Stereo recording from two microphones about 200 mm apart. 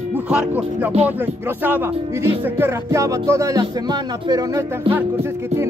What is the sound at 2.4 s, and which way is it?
Music, 10° right (ahead or behind).